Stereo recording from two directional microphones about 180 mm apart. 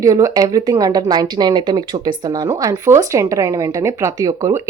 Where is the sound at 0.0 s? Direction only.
20° right (ahead or behind).